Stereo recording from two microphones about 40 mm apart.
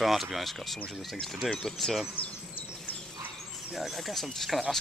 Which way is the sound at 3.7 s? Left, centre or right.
Centre.